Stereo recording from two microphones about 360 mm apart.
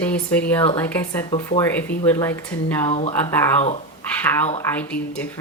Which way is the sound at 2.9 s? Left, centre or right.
Centre.